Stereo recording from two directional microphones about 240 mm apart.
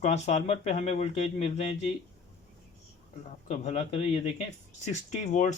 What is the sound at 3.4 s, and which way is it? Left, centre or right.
Speech, left.